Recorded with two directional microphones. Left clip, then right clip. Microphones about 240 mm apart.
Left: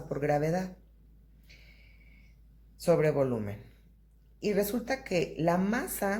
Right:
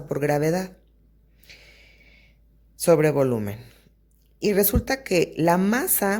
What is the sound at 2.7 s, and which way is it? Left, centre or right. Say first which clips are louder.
Speech: right 7 dB; right.